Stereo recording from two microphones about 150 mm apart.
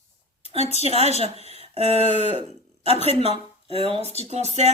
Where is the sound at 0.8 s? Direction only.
45° right (ahead or behind).